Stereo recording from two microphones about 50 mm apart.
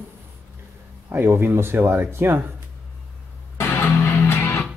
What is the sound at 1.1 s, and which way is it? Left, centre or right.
Speech, right.